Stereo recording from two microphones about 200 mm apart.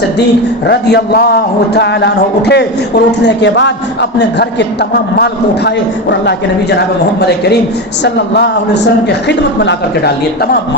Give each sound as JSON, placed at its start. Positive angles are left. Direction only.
{"t": 0.7, "sound": "a man's voice", "side_deg": 55}